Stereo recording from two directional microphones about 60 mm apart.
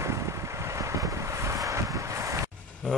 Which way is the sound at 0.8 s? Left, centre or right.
Right.